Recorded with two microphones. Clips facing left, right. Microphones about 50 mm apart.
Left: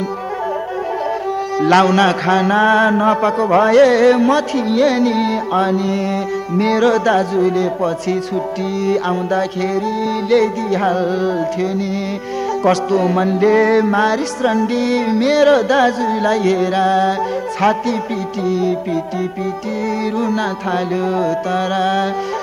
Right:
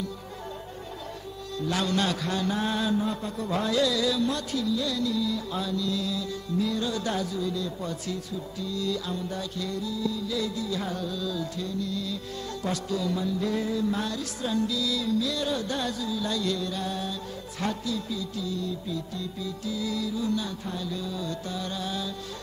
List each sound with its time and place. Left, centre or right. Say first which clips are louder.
1.6 s music: left 15 dB; left
20.2 s music: left 12 dB; left